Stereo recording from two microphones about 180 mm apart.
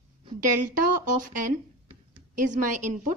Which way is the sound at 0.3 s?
50° right (ahead or behind).